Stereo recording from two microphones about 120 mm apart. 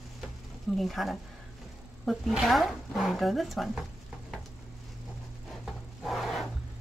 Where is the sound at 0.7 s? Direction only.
Centre (ahead or behind).